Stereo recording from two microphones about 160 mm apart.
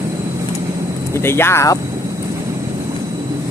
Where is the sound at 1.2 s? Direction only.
15° left (ahead or behind).